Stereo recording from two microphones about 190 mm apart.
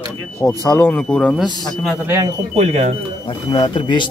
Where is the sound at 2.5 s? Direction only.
35° right (ahead or behind).